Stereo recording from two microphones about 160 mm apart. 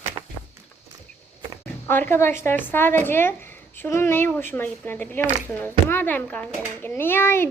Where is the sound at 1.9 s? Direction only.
15° left (ahead or behind).